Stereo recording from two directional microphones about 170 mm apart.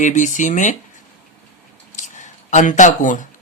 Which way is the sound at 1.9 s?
45° left (ahead or behind).